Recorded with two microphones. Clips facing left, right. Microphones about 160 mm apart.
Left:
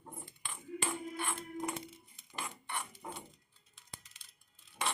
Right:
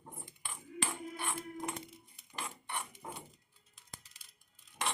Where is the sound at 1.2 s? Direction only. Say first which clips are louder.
Left 1 dB; 5° right (ahead or behind).